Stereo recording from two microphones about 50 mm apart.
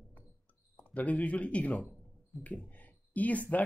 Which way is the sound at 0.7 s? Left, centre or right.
Left.